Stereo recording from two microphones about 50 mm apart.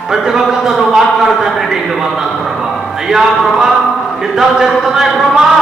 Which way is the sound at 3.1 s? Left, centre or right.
Centre.